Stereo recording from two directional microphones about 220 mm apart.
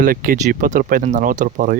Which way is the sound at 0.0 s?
40° right (ahead or behind).